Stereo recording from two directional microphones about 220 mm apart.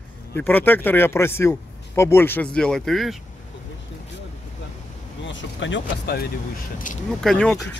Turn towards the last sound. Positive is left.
turn(degrees=0)  # may be behind; listen again after turning